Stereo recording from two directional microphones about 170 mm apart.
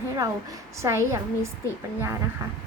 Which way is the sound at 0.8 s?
15° right (ahead or behind).